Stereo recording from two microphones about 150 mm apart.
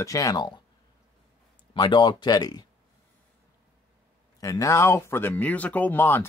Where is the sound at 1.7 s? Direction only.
30° left (ahead or behind).